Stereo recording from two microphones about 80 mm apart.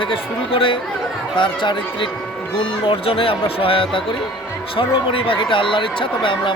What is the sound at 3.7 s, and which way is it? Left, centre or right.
Speech, left.